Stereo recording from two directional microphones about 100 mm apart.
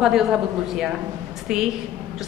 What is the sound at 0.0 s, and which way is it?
A woman's voice, 5° right (ahead or behind).